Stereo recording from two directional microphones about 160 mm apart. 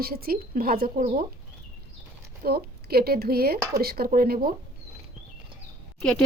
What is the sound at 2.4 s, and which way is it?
A woman's voice, 75° right (ahead or behind).